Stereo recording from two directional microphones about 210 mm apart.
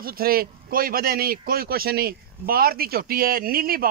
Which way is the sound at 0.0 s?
45° right (ahead or behind).